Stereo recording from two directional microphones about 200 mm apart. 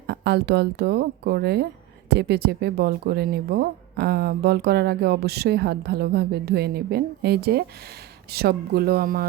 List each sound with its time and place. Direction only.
0.1 s speech: 55° right (ahead or behind)